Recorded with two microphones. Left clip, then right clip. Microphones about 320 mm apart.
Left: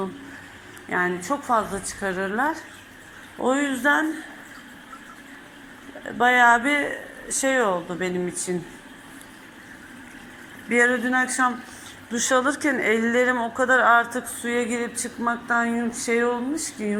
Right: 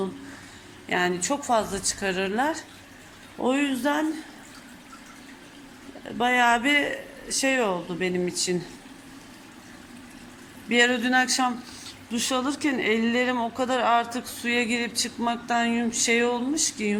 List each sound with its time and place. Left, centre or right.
0.9 s a woman's voice: right
6.1 s speech: centre
6.7 s a woman's voice: right
10.7 s a woman's voice: right
14.6 s a woman's voice: right